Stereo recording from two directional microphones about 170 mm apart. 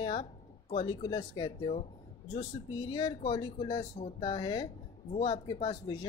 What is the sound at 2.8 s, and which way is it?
Speech, 25° left (ahead or behind).